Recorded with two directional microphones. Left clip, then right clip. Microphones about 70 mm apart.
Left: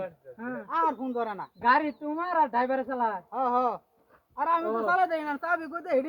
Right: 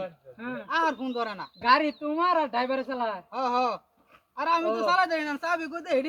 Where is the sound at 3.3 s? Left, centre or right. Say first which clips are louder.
Right 2 dB; left.